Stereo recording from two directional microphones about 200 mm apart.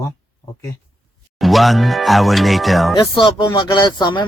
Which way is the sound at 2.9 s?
25° left (ahead or behind).